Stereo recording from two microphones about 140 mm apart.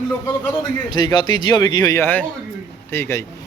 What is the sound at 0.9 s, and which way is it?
Speech, 30° left (ahead or behind).